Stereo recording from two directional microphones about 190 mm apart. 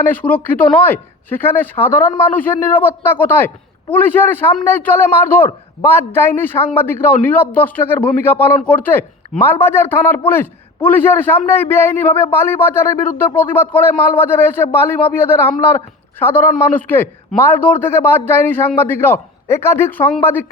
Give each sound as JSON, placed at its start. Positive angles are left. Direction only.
{"t": 0.0, "sound": "a man's voice", "side_deg": 10}